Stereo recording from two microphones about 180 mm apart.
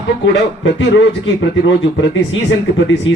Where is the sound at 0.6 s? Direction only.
85° left.